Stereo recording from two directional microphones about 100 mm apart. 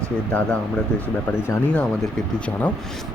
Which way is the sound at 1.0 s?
25° left (ahead or behind).